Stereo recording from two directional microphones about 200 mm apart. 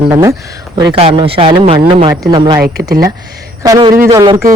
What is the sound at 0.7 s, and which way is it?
Speech, 25° right (ahead or behind).